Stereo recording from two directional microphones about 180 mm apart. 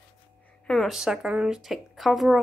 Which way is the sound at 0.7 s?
Centre (ahead or behind).